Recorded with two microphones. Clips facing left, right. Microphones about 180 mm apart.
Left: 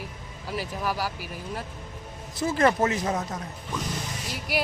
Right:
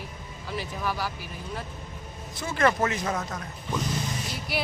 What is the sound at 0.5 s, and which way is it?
Speech, 10° left (ahead or behind).